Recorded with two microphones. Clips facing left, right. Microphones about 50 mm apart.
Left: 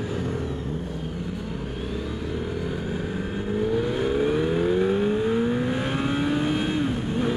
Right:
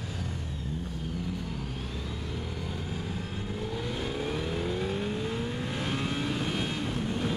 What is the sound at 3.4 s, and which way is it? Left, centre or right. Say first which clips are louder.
Vehicle: left 12 dB; left.